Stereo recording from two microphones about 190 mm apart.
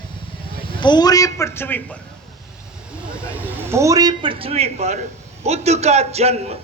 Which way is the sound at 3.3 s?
10° right (ahead or behind).